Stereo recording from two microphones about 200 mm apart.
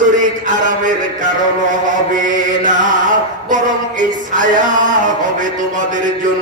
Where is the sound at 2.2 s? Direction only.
40° right (ahead or behind).